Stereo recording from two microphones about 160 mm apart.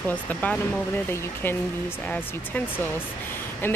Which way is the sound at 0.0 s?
10° left (ahead or behind).